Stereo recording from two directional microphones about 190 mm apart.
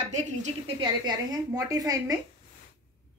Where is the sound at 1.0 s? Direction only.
20° right (ahead or behind).